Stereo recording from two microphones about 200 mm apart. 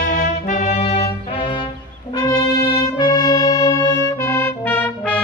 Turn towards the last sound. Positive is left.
turn(degrees=5)  # may be behind; listen again after turning